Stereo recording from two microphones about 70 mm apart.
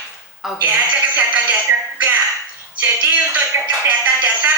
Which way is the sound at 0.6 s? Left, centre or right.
Right.